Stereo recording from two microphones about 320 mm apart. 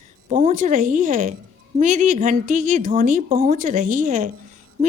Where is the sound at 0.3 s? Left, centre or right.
Right.